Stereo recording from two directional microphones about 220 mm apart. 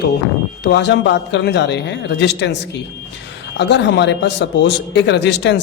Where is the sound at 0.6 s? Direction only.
50° left (ahead or behind).